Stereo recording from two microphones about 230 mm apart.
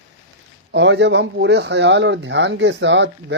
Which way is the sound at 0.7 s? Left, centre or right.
Right.